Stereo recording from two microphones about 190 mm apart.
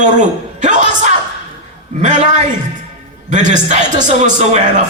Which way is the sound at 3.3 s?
40° right (ahead or behind).